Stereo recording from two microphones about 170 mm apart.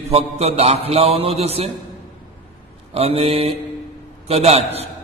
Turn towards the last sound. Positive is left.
turn(degrees=-35)  # may be behind; listen again after turning